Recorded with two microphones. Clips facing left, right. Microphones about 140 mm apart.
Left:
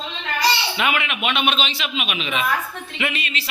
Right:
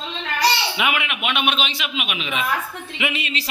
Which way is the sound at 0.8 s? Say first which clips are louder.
Left 1 dB; 10° right (ahead or behind).